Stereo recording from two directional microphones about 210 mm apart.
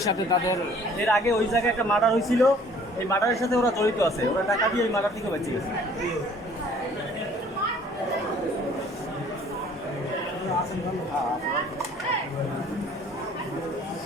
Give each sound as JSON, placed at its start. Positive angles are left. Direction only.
{"t": 0.0, "sound": "speech", "side_deg": 15}
{"t": 1.9, "sound": "a man's voice", "side_deg": 0}
{"t": 3.1, "sound": "speech", "side_deg": 15}